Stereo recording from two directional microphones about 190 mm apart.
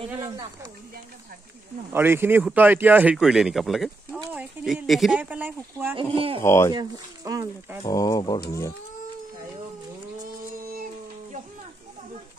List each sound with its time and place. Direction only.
1.9 s speech: 10° right (ahead or behind)
5.9 s speech: 30° right (ahead or behind)
6.4 s speech: 15° left (ahead or behind)
6.7 s speech: 20° right (ahead or behind)
7.8 s speech: 20° left (ahead or behind)